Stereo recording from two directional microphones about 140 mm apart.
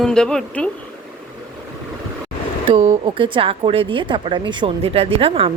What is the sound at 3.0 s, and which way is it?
Speech, 35° right (ahead or behind).